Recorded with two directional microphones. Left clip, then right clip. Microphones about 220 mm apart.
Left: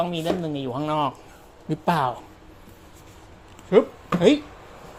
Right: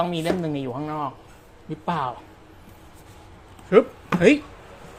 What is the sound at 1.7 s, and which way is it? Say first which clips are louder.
Speech: left 4 dB; 25° left (ahead or behind).